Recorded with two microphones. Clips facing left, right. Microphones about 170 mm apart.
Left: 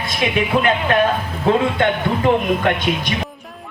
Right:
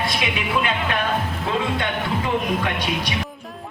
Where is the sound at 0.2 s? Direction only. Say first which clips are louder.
Left 6 dB; 50° left (ahead or behind).